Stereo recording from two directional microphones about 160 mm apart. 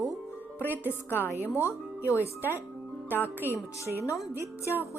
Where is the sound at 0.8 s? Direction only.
15° left (ahead or behind).